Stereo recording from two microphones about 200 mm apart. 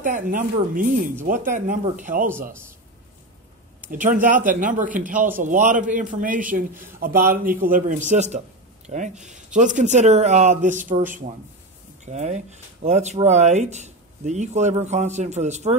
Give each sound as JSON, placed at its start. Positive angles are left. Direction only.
{"t": 0.0, "sound": "speech", "side_deg": -40}
{"t": 3.9, "sound": "speech", "side_deg": -40}